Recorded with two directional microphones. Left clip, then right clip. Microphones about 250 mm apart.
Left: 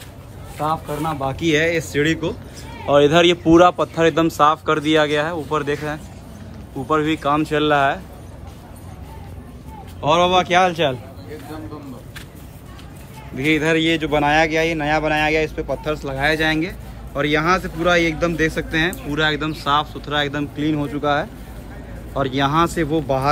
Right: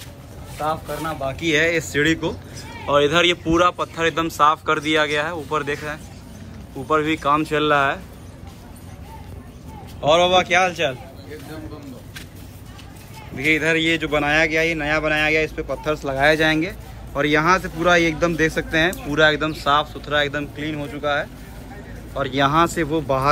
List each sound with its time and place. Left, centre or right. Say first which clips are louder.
0.8 s speech: left 2 dB; centre
6.9 s speech: even; centre
10.0 s speech: even; centre
13.4 s speech: left 1 dB; centre